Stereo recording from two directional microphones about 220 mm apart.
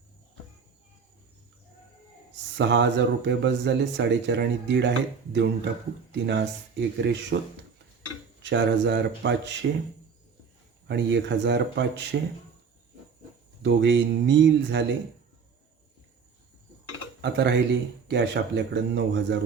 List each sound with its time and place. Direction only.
2.6 s speech: 55° right (ahead or behind)
8.4 s speech: 55° right (ahead or behind)
10.8 s speech: 50° right (ahead or behind)
13.6 s speech: 55° right (ahead or behind)
17.2 s speech: 50° right (ahead or behind)